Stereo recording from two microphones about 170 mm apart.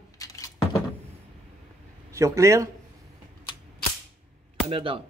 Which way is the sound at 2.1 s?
15° right (ahead or behind).